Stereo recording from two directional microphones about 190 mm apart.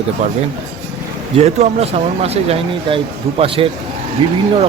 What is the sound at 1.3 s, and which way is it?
A man's voice, 35° right (ahead or behind).